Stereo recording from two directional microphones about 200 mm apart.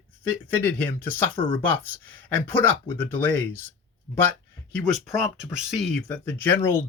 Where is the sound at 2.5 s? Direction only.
10° left (ahead or behind).